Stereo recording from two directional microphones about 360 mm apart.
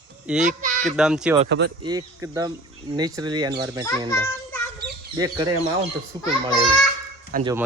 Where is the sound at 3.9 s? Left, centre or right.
Centre.